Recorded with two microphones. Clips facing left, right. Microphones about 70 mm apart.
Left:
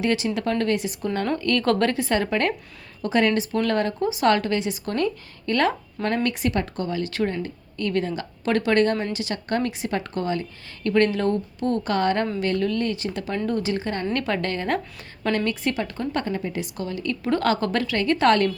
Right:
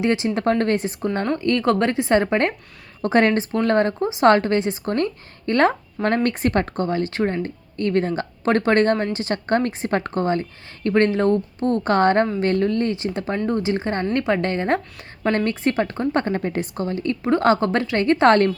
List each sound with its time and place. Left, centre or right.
0.0 s speech: right
1.2 s speech: right
3.0 s speech: right
3.5 s speech: right